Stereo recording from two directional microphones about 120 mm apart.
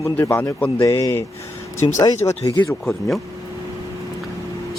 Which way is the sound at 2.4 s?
40° left (ahead or behind).